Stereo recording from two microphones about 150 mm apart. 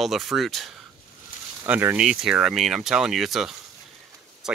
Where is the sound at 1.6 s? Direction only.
15° right (ahead or behind).